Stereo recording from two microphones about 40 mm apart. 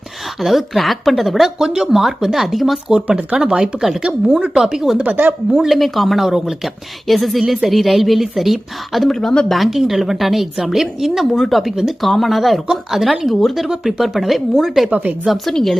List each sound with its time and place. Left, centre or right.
0.4 s a woman's voice: centre
1.5 s a woman's voice: centre
3.1 s speech: right
3.5 s a woman's voice: centre
4.0 s a woman's voice: right
4.5 s a woman's voice: centre
9.0 s speech: centre
9.5 s a woman's voice: centre
11.3 s a woman's voice: centre
14.8 s speech: right
15.5 s speech: centre